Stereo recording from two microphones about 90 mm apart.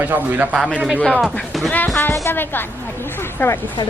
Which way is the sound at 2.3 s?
25° left (ahead or behind).